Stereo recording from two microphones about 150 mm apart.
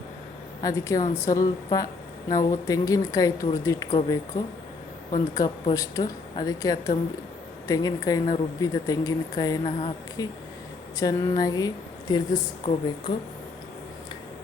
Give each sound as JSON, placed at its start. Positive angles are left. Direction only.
{"t": 0.6, "sound": "a woman's voice", "side_deg": 20}